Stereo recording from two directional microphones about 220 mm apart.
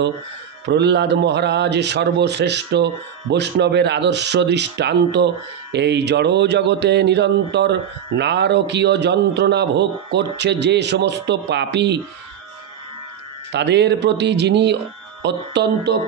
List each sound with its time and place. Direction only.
0.7 s a man's voice: 50° right (ahead or behind)
13.5 s a man's voice: 50° right (ahead or behind)